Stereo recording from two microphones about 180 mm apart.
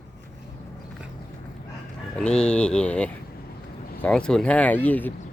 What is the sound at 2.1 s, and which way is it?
Speech, 5° left (ahead or behind).